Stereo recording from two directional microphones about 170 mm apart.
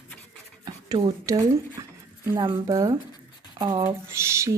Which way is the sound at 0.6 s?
25° right (ahead or behind).